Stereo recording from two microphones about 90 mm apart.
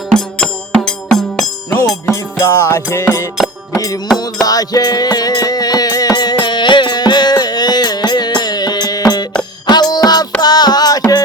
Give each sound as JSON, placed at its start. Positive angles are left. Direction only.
{"t": 0.9, "sound": "music", "side_deg": 5}
{"t": 2.0, "sound": "music", "side_deg": 35}
{"t": 3.3, "sound": "music", "side_deg": -5}
{"t": 4.4, "sound": "music", "side_deg": 45}